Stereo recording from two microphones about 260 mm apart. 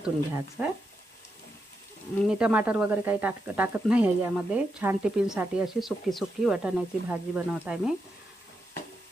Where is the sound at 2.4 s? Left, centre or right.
Centre.